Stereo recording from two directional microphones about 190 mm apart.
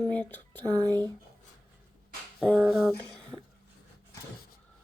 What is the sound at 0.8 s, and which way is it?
Speech, 20° right (ahead or behind).